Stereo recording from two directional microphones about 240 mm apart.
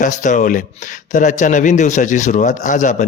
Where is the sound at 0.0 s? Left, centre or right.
Left.